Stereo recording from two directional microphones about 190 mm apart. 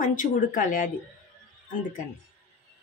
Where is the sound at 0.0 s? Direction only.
45° left (ahead or behind).